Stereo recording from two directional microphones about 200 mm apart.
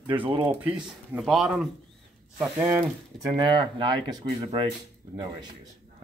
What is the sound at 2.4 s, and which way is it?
Ratchet, 10° right (ahead or behind).